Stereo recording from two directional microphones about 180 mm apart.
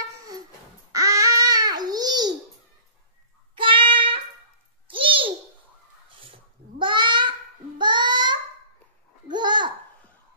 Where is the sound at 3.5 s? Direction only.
30° right (ahead or behind).